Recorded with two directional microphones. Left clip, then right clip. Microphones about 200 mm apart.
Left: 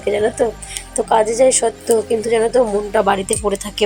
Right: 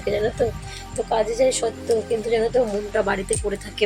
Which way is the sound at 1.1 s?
20° left (ahead or behind).